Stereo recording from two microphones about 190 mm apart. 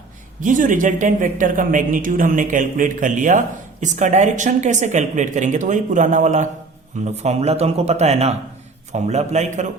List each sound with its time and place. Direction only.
0.4 s a man's voice: 45° right (ahead or behind)